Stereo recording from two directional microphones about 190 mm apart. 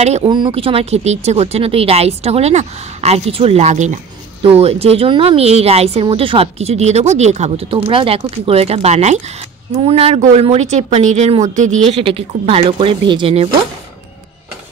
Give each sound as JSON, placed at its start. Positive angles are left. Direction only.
{"t": 0.0, "sound": "speech", "side_deg": -35}